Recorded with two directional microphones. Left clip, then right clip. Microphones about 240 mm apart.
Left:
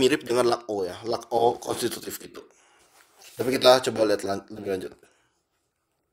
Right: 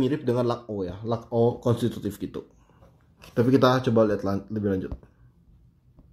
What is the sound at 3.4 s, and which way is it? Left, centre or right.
Speech, centre.